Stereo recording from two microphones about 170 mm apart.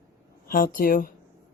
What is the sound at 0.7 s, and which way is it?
Speech, 55° left (ahead or behind).